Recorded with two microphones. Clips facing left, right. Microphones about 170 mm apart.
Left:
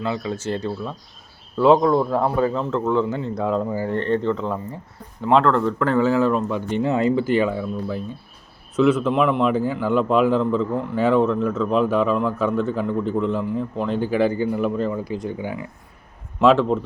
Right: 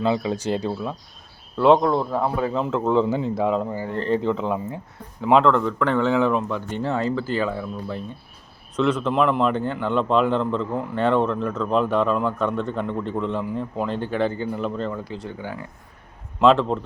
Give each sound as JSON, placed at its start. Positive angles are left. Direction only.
{"t": 0.0, "sound": "speech", "side_deg": -15}
{"t": 1.5, "sound": "a man's voice", "side_deg": 0}
{"t": 2.8, "sound": "speech", "side_deg": -25}
{"t": 3.1, "sound": "a man's voice", "side_deg": -10}
{"t": 6.7, "sound": "speech", "side_deg": 15}
{"t": 7.5, "sound": "a man's voice", "side_deg": 5}